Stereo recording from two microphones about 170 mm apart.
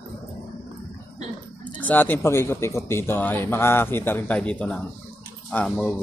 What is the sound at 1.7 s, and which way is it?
A man's voice, 10° left (ahead or behind).